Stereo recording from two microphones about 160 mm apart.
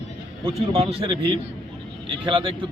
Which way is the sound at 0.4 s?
35° right (ahead or behind).